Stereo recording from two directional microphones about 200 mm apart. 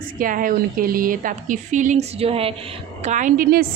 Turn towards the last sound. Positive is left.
turn(degrees=-50)  # may be behind; listen again after turning